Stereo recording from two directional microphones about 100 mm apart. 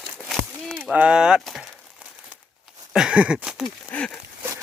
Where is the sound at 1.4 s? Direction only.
Centre (ahead or behind).